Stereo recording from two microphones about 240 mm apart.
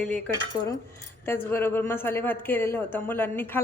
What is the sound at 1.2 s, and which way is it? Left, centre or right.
Speech, centre.